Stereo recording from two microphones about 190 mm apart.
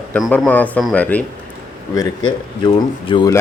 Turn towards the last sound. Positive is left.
turn(degrees=25)  # may be behind; listen again after turning